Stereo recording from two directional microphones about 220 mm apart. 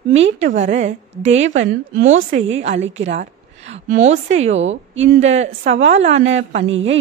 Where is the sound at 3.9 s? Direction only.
60° right (ahead or behind).